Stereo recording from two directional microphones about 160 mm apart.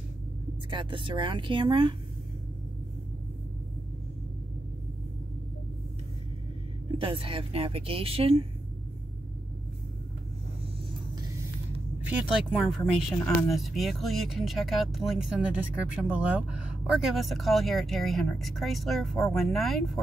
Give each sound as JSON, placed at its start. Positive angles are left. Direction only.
{"t": 0.7, "sound": "a woman's voice", "side_deg": -30}
{"t": 7.0, "sound": "a woman's voice", "side_deg": -35}
{"t": 12.7, "sound": "speech", "side_deg": 5}